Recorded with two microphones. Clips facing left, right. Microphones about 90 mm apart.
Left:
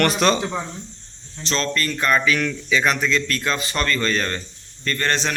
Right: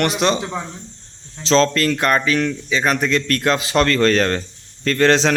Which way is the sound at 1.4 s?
90° right.